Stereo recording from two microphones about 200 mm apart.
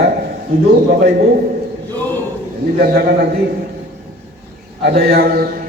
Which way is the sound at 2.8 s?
50° right (ahead or behind).